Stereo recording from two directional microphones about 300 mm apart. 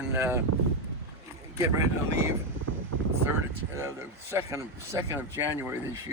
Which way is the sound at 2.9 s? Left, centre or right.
Right.